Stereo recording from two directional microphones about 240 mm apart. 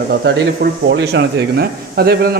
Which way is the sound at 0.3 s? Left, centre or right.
Right.